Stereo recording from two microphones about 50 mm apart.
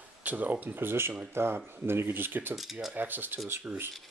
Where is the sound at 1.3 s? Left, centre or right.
Right.